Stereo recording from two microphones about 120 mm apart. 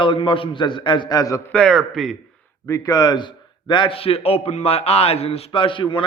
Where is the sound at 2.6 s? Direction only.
25° left (ahead or behind); by 6.0 s 45° left (ahead or behind).